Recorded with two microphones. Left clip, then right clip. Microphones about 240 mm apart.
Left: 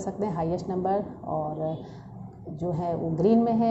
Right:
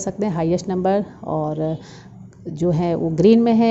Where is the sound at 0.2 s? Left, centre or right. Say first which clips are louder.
Right 8 dB; right.